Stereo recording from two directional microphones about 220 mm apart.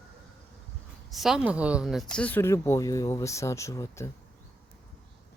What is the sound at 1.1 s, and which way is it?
Speech, centre (ahead or behind).